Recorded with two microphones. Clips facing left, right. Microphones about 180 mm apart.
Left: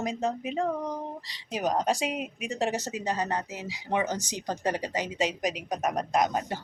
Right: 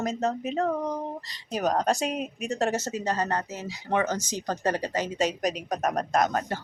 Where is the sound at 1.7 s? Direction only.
10° left (ahead or behind).